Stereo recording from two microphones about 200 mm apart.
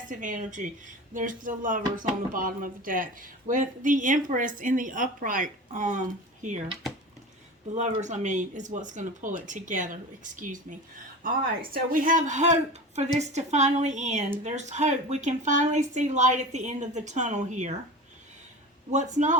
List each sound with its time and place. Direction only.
0.1 s speech: 40° right (ahead or behind)
7.8 s speech: 35° right (ahead or behind)
18.9 s speech: 35° right (ahead or behind)